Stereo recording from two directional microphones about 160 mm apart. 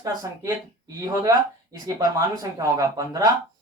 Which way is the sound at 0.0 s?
20° right (ahead or behind).